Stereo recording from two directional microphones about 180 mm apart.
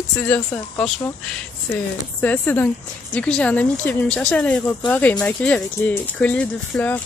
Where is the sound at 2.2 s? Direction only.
10° left (ahead or behind).